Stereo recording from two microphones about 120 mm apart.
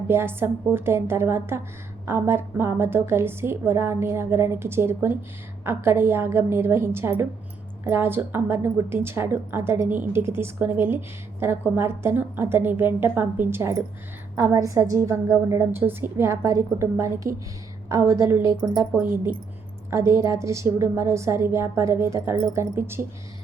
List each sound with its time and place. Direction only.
0.1 s a woman's voice: 20° right (ahead or behind)
18.6 s speech: 30° right (ahead or behind)
19.9 s a woman's voice: 25° right (ahead or behind)